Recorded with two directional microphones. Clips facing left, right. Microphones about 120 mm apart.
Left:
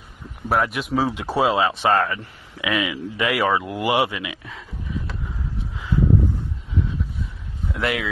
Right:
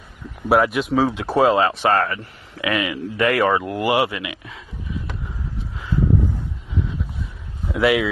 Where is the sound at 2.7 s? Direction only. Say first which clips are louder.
Right 1 dB; 25° right (ahead or behind).